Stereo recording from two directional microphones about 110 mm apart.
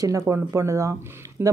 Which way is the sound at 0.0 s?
30° right (ahead or behind).